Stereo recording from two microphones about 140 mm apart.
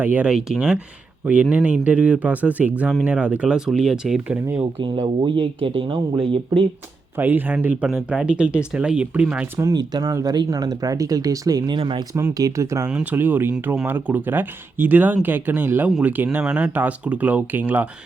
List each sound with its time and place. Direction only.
0.0 s speech: 10° right (ahead or behind)
4.4 s speech: 20° right (ahead or behind)
4.8 s speech: 35° right (ahead or behind)
7.2 s speech: 15° right (ahead or behind)
9.6 s speech: 25° right (ahead or behind)
12.1 s speech: 25° right (ahead or behind)
12.9 s speech: 10° right (ahead or behind)